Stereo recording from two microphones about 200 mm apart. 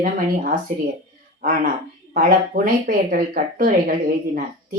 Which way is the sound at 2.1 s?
45° right (ahead or behind).